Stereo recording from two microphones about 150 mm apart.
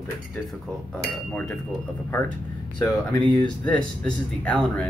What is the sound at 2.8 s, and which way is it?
Speech, 15° left (ahead or behind).